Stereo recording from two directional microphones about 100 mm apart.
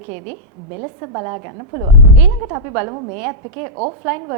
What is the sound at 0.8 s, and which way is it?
A woman's voice, 25° right (ahead or behind).